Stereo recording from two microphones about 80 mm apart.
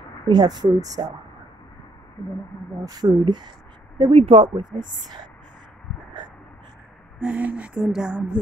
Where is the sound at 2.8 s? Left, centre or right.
Right.